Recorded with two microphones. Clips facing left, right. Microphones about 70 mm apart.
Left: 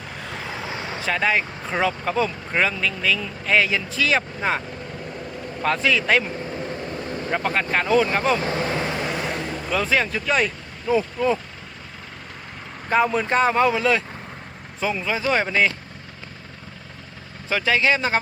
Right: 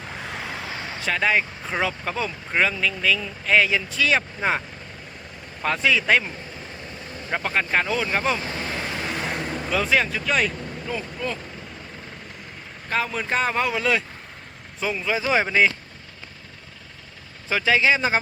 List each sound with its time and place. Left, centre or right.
0.3 s vehicle: centre
1.0 s speech: centre
5.6 s speech: centre
8.7 s vehicle: left
9.3 s vehicle: centre
10.9 s speech: centre
12.9 s speech: centre
17.5 s speech: centre